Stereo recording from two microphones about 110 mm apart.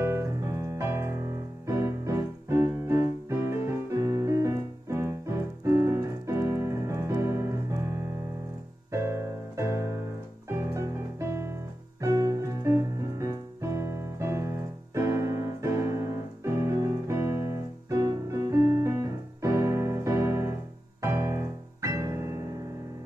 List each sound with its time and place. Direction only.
0.0 s music: 25° right (ahead or behind)
5.6 s keyboard: 25° right (ahead or behind)
8.9 s piano: 25° right (ahead or behind)
10.5 s music: 25° right (ahead or behind)
21.0 s keyboard: 25° right (ahead or behind)